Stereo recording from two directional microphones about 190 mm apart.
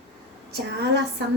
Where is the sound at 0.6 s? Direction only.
60° right (ahead or behind).